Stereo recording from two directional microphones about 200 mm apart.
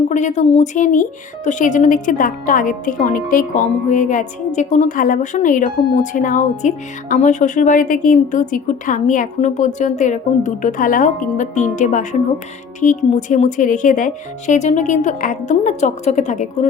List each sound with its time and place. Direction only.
0.1 s speech: 35° left (ahead or behind)